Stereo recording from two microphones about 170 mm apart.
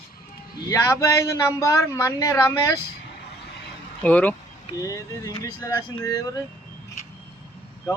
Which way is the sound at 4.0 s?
10° left (ahead or behind).